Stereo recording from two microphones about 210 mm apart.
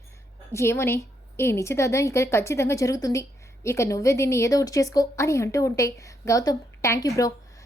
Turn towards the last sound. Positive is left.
turn(degrees=15)  # may be behind; listen again after turning